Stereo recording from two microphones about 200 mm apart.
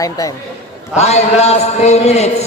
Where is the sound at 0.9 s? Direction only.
35° left (ahead or behind).